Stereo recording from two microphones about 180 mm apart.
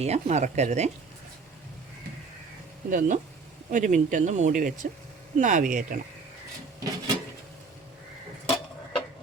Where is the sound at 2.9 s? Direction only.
45° right (ahead or behind).